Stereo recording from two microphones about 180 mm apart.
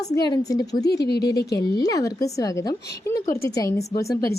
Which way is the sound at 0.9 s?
65° left (ahead or behind).